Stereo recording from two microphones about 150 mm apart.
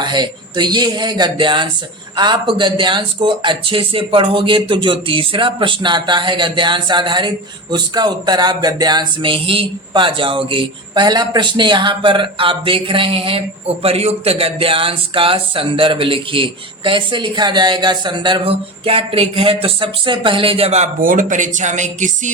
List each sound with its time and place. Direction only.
0.0 s speech: 30° right (ahead or behind); by 22.3 s 55° right (ahead or behind)